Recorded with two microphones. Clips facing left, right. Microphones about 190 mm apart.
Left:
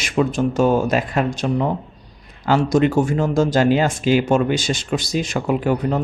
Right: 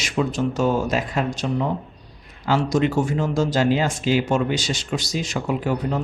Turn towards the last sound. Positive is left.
turn(degrees=55)  # may be behind; listen again after turning